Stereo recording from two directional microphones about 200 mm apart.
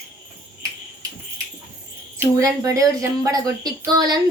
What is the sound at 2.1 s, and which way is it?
Child singing, 15° right (ahead or behind).